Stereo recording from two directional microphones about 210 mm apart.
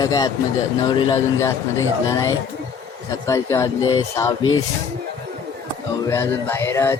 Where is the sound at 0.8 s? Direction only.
20° left (ahead or behind).